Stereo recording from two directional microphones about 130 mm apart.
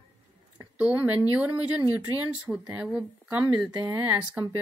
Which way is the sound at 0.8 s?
10° right (ahead or behind).